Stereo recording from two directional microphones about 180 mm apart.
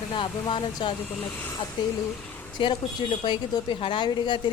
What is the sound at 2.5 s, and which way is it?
A woman's voice, 25° left (ahead or behind).